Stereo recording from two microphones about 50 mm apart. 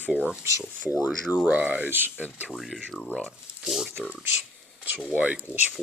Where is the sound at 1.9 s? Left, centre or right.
Right.